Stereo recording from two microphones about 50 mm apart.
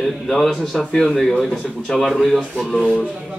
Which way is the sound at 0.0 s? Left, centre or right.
Centre.